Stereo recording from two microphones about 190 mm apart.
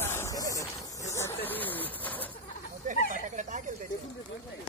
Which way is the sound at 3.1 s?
40° right (ahead or behind).